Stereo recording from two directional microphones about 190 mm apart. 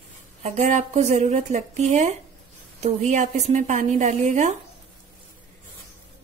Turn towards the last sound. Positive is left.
turn(degrees=-40)  # may be behind; listen again after turning